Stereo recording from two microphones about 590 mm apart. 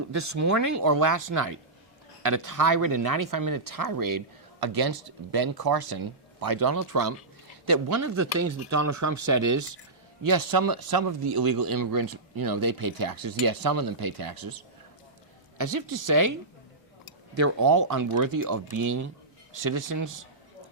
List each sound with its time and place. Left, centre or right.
0.1 s speech: right
17.3 s speech: right